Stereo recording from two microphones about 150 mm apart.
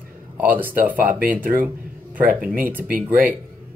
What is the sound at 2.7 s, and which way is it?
Speech, 10° right (ahead or behind).